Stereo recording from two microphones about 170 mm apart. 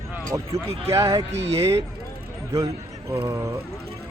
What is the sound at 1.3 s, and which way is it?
Speech, 40° right (ahead or behind).